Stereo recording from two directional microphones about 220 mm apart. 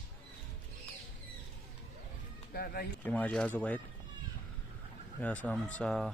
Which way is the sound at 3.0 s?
5° left (ahead or behind).